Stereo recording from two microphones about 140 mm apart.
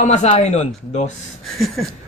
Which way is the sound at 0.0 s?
55° left (ahead or behind).